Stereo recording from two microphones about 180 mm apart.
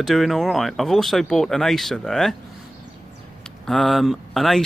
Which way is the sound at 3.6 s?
Centre (ahead or behind).